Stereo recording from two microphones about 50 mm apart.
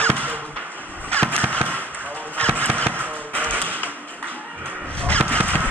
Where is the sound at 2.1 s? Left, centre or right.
Left.